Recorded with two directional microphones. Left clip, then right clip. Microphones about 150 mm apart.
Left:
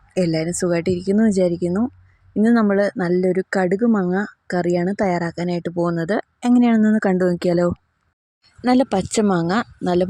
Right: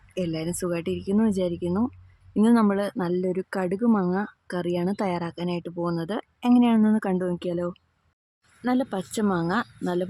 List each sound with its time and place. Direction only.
0.1 s speech: 30° left (ahead or behind)